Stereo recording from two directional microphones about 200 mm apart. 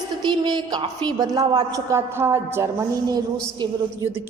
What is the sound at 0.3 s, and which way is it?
A woman's voice, 20° right (ahead or behind).